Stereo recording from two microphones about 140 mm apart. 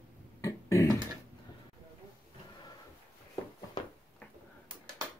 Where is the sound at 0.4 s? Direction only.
20° left (ahead or behind).